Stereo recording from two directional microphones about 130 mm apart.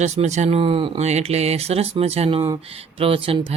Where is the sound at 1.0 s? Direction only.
60° right (ahead or behind).